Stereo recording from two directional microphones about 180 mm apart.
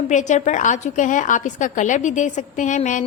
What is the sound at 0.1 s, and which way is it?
A woman's voice, 45° left (ahead or behind).